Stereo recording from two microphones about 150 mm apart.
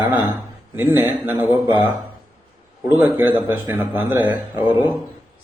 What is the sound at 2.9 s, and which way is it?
A man's voice, 15° right (ahead or behind).